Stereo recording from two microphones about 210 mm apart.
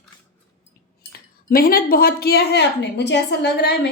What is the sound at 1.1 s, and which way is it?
A woman's voice, 45° left (ahead or behind).